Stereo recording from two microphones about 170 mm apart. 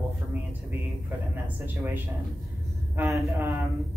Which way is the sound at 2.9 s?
15° right (ahead or behind).